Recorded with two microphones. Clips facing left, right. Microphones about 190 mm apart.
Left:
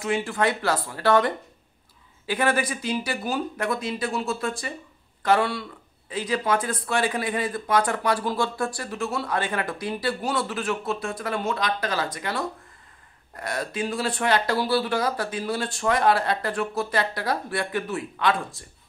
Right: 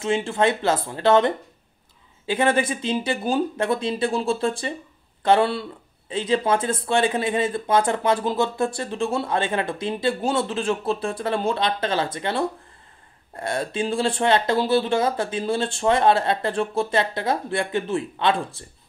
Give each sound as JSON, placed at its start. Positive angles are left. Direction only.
{"t": 0.0, "sound": "speech", "side_deg": -25}